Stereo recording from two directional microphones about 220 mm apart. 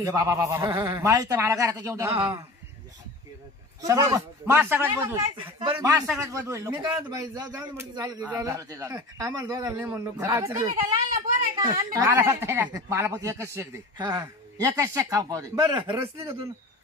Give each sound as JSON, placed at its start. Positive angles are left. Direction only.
{"t": 0.0, "sound": "a woman's voice", "side_deg": -15}
{"t": 3.8, "sound": "a woman's voice", "side_deg": -15}
{"t": 5.4, "sound": "a woman's voice", "side_deg": -20}